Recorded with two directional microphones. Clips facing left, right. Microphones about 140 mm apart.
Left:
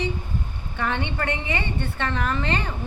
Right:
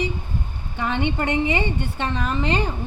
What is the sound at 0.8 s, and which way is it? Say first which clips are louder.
A woman's voice: right 3 dB; 15° right (ahead or behind).